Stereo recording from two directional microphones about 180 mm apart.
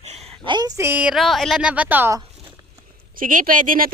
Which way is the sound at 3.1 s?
50° right (ahead or behind).